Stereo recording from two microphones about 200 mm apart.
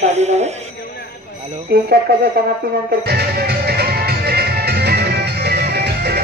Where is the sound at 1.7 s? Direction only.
50° right (ahead or behind).